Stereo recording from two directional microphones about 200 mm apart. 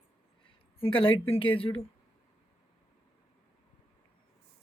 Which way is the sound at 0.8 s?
25° left (ahead or behind).